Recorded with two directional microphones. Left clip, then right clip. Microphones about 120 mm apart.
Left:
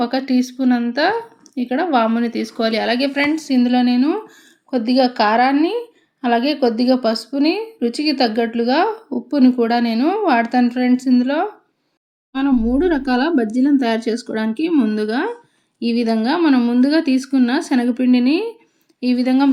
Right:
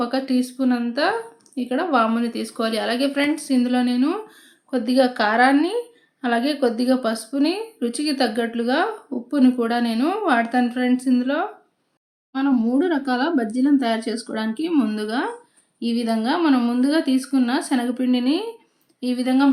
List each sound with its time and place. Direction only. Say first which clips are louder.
0.0 s a woman's voice: left 4 dB; 20° left (ahead or behind)